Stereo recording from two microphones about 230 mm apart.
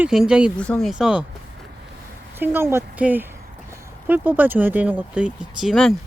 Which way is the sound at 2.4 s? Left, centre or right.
Centre.